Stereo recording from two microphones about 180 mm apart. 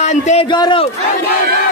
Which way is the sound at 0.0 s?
40° left (ahead or behind).